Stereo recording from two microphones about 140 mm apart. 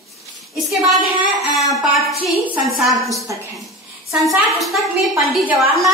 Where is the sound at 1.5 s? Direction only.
Centre (ahead or behind).